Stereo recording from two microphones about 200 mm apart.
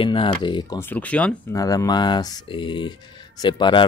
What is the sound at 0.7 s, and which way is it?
Speech, 10° left (ahead or behind).